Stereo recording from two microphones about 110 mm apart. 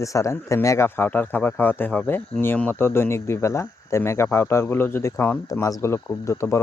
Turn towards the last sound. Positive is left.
turn(degrees=25)  # may be behind; listen again after turning